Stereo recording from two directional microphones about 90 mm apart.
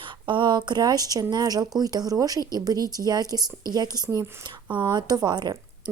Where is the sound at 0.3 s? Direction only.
60° right (ahead or behind); by 4.3 s 40° right (ahead or behind).